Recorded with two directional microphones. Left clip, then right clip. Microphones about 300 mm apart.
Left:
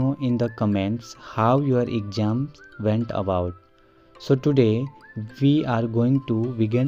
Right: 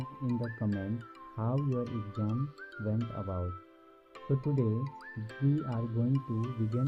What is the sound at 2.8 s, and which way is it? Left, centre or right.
Speech, left.